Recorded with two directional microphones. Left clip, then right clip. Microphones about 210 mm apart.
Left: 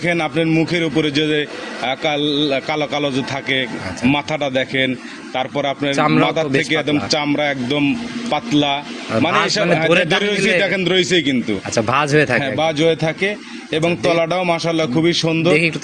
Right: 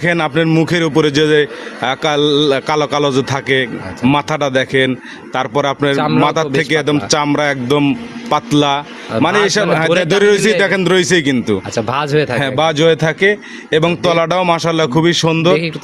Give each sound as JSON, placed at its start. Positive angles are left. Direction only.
{"t": 0.0, "sound": "a man's voice", "side_deg": -55}
{"t": 6.0, "sound": "speech", "side_deg": -20}
{"t": 6.2, "sound": "a man's voice", "side_deg": -55}
{"t": 9.1, "sound": "a man's voice", "side_deg": -15}
{"t": 10.2, "sound": "a man's voice", "side_deg": -60}
{"t": 11.7, "sound": "speech", "side_deg": -20}
{"t": 12.4, "sound": "a man's voice", "side_deg": -55}